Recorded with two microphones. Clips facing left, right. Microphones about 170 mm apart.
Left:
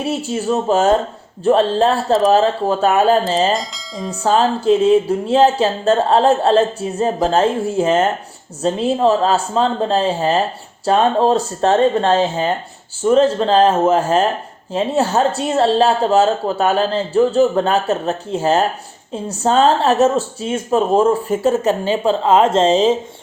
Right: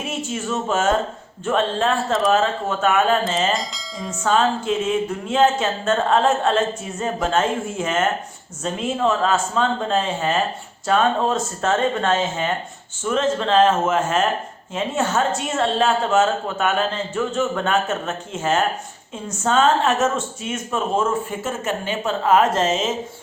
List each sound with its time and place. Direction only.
0.0 s speech: 35° left (ahead or behind)
3.5 s speech: centre (ahead or behind)
4.2 s speech: 35° left (ahead or behind)